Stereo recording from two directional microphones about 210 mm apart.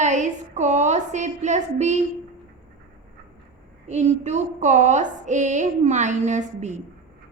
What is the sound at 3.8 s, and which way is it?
A woman's voice, 35° right (ahead or behind).